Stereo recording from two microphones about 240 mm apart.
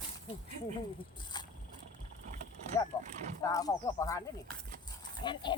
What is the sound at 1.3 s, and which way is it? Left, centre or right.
Vehicle, centre.